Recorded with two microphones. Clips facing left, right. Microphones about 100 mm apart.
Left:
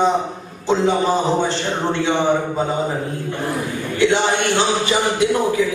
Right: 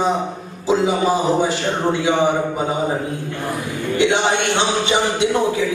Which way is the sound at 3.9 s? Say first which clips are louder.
Even; 20° right (ahead or behind).